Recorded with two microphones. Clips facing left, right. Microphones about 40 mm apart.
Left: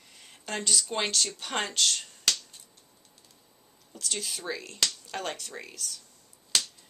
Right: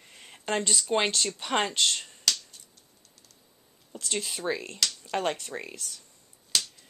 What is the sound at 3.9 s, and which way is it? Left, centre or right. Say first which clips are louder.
Speech: right 3 dB; right.